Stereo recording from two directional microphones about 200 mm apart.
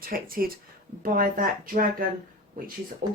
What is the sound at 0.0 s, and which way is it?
Speech, 45° right (ahead or behind).